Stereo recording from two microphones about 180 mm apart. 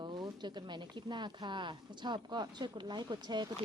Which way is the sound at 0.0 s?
25° right (ahead or behind).